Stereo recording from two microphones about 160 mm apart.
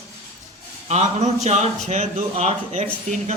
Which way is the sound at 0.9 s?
45° right (ahead or behind).